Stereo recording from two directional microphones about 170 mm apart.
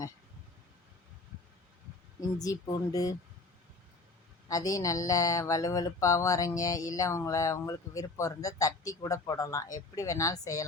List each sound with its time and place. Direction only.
2.4 s speech: 20° left (ahead or behind)
4.4 s speech: 20° left (ahead or behind)